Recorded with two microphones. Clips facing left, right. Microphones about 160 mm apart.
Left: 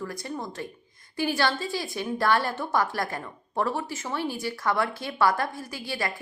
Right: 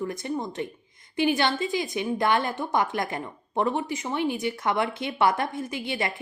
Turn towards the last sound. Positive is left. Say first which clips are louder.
# right 3 dB
turn(degrees=-20)  # may be behind; listen again after turning